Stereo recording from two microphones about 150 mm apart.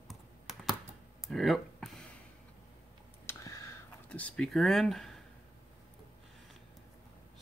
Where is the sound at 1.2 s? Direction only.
Centre (ahead or behind).